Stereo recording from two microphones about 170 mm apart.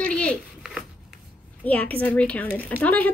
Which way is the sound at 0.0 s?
5° left (ahead or behind).